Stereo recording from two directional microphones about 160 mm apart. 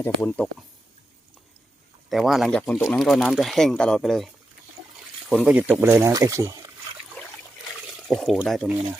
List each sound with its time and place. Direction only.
0.0 s speech: 10° left (ahead or behind)
2.0 s speech: centre (ahead or behind)
5.3 s speech: 5° right (ahead or behind)
8.0 s speech: centre (ahead or behind)